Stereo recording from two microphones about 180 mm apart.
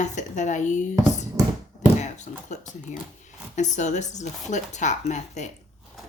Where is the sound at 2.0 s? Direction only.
40° left (ahead or behind).